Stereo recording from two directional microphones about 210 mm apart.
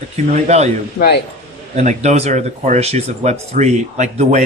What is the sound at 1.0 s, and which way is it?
Speech, 50° left (ahead or behind).